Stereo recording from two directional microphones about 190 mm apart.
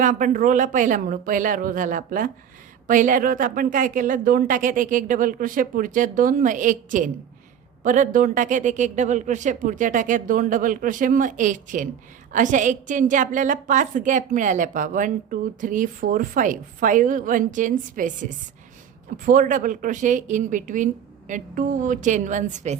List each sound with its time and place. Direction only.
0.0 s a woman's voice: 45° right (ahead or behind)